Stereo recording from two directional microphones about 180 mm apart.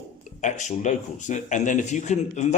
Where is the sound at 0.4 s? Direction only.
45° left (ahead or behind).